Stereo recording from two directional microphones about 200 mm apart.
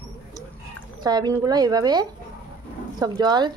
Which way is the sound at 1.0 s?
20° right (ahead or behind).